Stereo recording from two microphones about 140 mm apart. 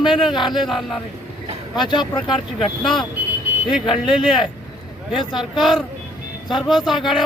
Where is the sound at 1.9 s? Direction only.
30° left (ahead or behind).